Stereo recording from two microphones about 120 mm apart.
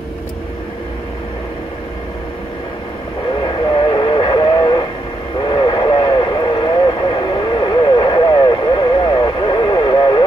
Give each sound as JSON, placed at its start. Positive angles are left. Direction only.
{"t": 3.3, "sound": "vehicle", "side_deg": 40}